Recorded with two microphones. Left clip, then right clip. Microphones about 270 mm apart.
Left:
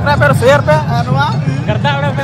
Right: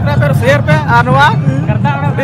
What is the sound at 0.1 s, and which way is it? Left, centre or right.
Speech, centre.